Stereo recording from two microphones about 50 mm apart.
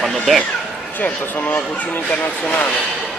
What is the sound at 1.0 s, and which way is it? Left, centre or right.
Speech, left.